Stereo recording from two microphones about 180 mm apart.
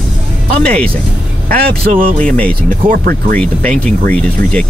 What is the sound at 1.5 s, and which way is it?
Speech, 50° right (ahead or behind).